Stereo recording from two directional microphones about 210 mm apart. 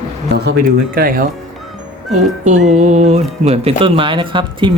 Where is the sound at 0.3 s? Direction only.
50° right (ahead or behind).